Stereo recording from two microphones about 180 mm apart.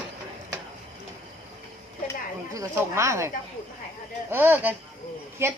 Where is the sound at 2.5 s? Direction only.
15° right (ahead or behind).